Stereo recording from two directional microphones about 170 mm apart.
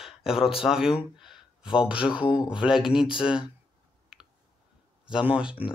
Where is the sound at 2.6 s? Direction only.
5° right (ahead or behind).